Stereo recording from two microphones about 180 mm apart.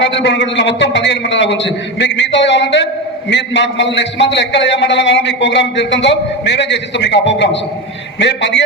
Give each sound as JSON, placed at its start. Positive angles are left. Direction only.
{"t": 0.0, "sound": "a man's voice", "side_deg": 80}